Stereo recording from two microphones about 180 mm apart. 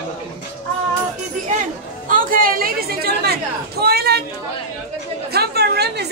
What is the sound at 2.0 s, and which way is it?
Chatter, 50° right (ahead or behind).